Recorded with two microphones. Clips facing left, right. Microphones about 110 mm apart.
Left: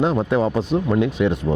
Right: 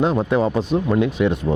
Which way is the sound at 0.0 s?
30° right (ahead or behind).